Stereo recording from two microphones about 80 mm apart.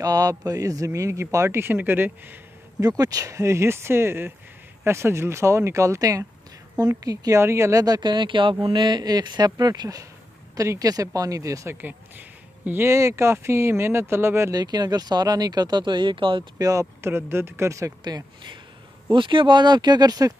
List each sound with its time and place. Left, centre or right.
0.0 s speech: right
2.8 s speech: right
8.6 s speech: right
11.7 s speech: right
14.5 s speech: right
16.5 s speech: right
17.0 s speech: right
18.0 s speech: right
19.1 s speech: right